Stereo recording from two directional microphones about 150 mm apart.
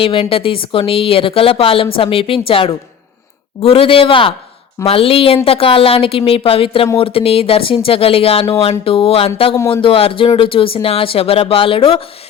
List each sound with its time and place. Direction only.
0.0 s speech: 40° left (ahead or behind)